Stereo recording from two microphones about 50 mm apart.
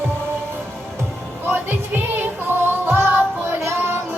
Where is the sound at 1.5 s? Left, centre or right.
Right.